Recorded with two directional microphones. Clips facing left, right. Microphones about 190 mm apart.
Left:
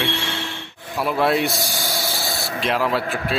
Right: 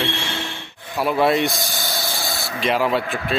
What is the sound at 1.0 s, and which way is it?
Speech, centre (ahead or behind).